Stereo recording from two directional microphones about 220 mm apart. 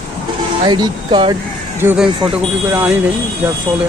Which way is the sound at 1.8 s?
10° right (ahead or behind).